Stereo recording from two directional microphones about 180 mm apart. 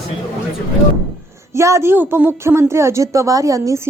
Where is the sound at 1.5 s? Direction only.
15° right (ahead or behind).